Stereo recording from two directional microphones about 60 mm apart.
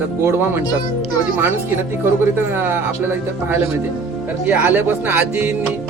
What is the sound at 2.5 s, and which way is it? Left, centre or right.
Speech, right.